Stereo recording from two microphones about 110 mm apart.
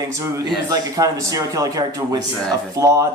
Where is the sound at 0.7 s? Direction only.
35° right (ahead or behind).